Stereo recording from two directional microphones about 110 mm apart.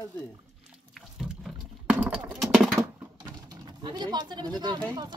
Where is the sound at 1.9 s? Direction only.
10° right (ahead or behind).